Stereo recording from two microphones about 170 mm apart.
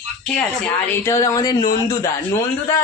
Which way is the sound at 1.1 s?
20° left (ahead or behind).